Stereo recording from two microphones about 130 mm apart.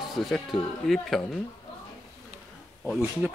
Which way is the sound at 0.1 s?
Centre (ahead or behind).